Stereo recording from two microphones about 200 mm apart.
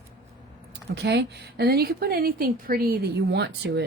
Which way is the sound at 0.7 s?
60° right (ahead or behind).